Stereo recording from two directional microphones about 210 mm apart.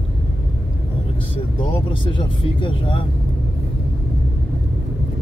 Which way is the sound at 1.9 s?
25° left (ahead or behind).